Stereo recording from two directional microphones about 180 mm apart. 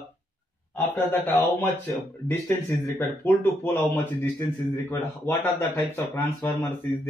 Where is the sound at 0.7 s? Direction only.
10° left (ahead or behind).